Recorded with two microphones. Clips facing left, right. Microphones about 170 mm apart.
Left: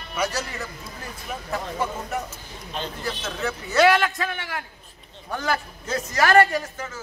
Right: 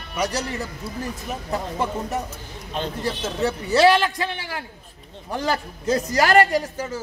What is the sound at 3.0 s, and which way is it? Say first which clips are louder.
A man's voice: right 5 dB; 35° right (ahead or behind).